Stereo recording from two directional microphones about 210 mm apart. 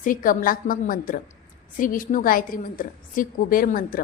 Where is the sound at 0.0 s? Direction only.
40° left (ahead or behind).